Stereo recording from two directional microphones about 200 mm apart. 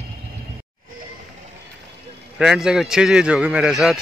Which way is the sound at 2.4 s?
5° right (ahead or behind).